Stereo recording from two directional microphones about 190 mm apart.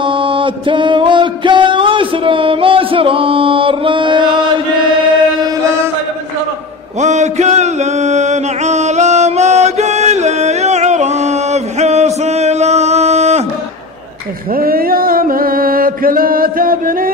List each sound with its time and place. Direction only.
0.0 s music: 25° right (ahead or behind)
7.0 s chant: 35° right (ahead or behind)
12.2 s a sound: 35° right (ahead or behind)
14.5 s mantra: 50° right (ahead or behind)